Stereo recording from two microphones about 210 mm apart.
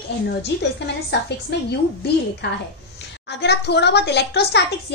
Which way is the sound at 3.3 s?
55° left (ahead or behind).